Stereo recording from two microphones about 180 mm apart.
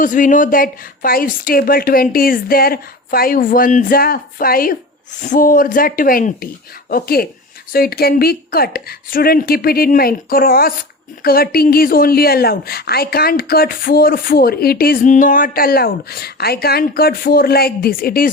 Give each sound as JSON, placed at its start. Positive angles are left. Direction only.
{"t": 0.0, "sound": "a woman's voice", "side_deg": 45}